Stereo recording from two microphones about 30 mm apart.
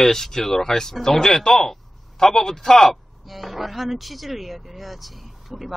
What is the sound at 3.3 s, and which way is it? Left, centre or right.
Speech, centre.